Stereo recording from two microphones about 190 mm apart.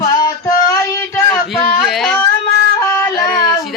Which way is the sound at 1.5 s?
Centre (ahead or behind).